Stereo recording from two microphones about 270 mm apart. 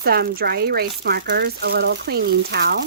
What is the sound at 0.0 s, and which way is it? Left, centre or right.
Speech, right.